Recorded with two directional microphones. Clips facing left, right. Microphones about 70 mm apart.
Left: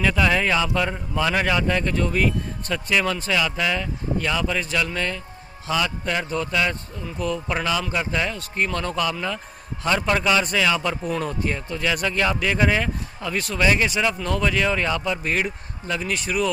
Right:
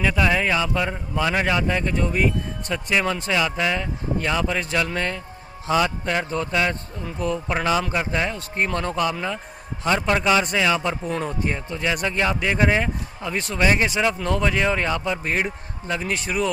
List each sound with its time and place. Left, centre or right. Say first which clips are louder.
0.0 s a man's voice: even; centre; by 9.1 s right
9.8 s a man's voice: right 1 dB; centre